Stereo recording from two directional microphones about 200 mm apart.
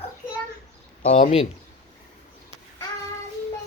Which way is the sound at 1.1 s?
35° left (ahead or behind).